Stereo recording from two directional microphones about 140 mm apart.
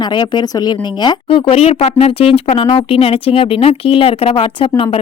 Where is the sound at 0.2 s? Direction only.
30° left (ahead or behind).